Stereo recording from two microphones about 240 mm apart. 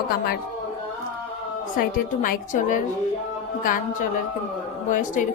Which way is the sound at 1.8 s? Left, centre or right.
Left.